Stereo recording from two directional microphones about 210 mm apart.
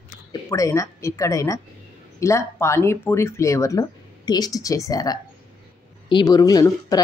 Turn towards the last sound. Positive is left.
turn(degrees=15)  # may be behind; listen again after turning